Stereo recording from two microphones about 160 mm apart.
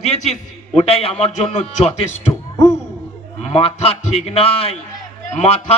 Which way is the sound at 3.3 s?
40° left (ahead or behind).